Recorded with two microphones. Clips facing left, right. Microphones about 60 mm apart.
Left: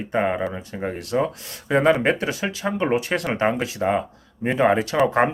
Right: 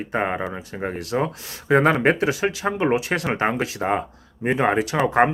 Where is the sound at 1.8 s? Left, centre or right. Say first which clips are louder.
Left 2 dB; right.